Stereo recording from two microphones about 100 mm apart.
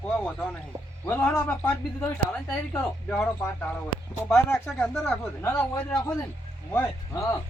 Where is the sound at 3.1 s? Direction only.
10° left (ahead or behind).